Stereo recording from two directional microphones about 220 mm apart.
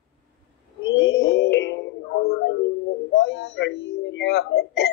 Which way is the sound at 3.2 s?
50° left (ahead or behind).